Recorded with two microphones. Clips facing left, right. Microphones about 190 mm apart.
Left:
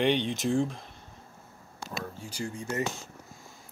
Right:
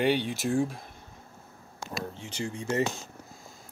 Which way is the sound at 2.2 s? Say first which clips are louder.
Right 1 dB; 25° right (ahead or behind).